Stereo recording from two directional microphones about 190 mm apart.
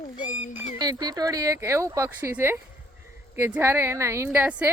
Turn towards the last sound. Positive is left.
turn(degrees=-10)  # may be behind; listen again after turning